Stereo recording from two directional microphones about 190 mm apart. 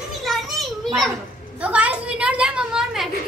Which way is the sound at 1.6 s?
5° right (ahead or behind).